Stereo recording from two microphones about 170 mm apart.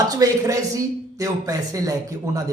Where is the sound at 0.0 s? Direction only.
20° right (ahead or behind).